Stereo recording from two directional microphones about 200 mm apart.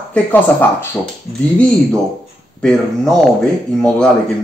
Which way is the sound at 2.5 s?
5° left (ahead or behind).